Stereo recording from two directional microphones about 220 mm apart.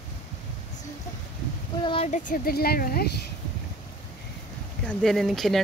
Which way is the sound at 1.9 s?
30° left (ahead or behind).